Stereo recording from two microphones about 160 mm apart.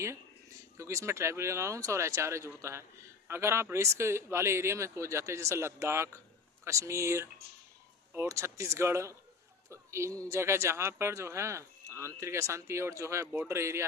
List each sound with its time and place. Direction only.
0.8 s a man's voice: 20° right (ahead or behind)